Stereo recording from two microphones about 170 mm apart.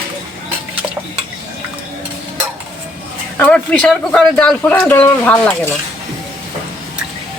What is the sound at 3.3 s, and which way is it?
Speech, 10° left (ahead or behind).